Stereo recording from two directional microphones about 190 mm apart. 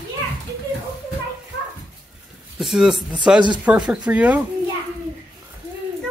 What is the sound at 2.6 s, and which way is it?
Speech, centre (ahead or behind).